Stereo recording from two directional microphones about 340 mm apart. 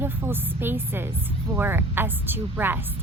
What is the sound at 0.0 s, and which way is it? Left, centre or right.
A woman's voice, centre.